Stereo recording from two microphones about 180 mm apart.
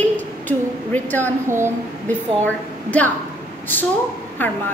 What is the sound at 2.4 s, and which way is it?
Speech, 10° left (ahead or behind).